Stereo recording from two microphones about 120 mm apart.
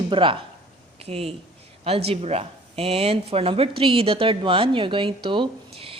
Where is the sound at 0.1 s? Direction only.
45° right (ahead or behind).